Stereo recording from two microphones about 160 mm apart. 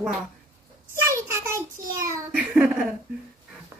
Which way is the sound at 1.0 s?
15° right (ahead or behind).